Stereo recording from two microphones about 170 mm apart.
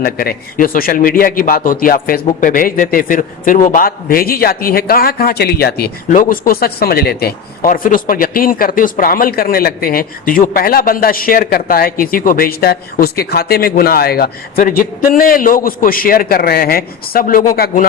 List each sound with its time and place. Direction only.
0.0 s a man's voice: 60° left (ahead or behind)